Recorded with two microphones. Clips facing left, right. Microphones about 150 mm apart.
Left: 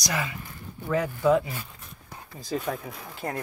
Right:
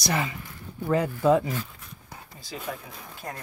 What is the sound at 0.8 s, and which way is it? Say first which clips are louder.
Speech: right 1 dB; 30° right (ahead or behind).